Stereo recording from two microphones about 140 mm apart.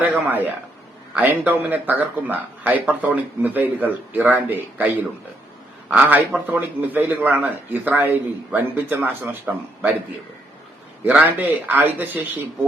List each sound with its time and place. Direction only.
0.0 s speech: 10° right (ahead or behind)
11.0 s speech: 10° right (ahead or behind)